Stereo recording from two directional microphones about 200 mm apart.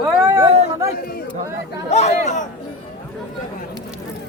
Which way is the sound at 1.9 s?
35° left (ahead or behind).